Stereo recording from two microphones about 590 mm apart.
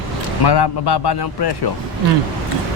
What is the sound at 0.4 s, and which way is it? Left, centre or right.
A man's voice, left.